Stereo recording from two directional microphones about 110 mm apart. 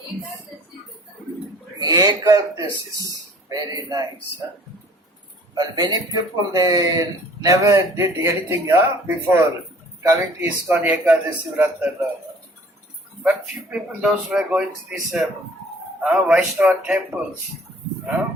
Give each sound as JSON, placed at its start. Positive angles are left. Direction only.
{"t": 1.8, "sound": "speech", "side_deg": -40}
{"t": 2.6, "sound": "speech", "side_deg": 40}
{"t": 3.1, "sound": "a sound", "side_deg": -35}
{"t": 5.5, "sound": "speech", "side_deg": -40}
{"t": 13.7, "sound": "speech", "side_deg": -10}